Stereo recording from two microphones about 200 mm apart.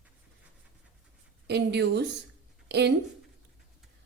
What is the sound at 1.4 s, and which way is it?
Speech, 55° right (ahead or behind).